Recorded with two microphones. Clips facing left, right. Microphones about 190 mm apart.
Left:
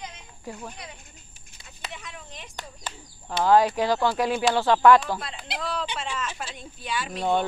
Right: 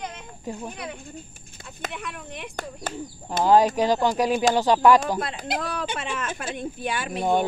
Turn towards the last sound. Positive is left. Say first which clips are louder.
# right 2 dB
turn(degrees=-15)  # may be behind; listen again after turning